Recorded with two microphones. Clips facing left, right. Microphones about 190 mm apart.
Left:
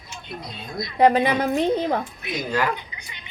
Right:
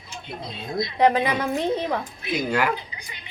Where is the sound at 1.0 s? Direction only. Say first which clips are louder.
Left 3 dB; 30° left (ahead or behind).